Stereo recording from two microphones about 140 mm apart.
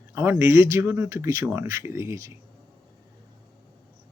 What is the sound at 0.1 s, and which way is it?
Speech, 15° right (ahead or behind).